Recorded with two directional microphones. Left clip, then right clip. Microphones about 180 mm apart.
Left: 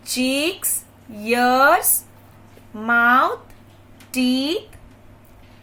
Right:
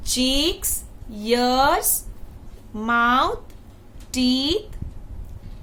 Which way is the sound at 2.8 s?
20° right (ahead or behind).